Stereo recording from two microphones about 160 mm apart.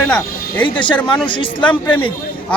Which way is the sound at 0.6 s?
30° left (ahead or behind).